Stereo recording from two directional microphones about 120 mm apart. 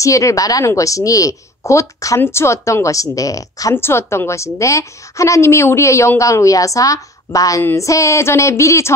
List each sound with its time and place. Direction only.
0.0 s a woman's voice: 25° left (ahead or behind)